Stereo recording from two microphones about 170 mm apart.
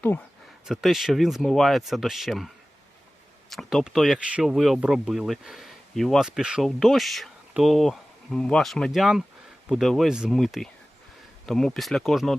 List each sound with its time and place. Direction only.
0.7 s speech: centre (ahead or behind)
3.5 s speech: centre (ahead or behind)